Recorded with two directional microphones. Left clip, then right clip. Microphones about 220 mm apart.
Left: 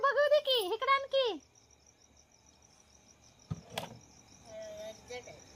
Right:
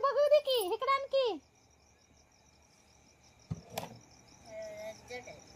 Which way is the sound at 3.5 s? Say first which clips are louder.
Left 1 dB; 10° right (ahead or behind).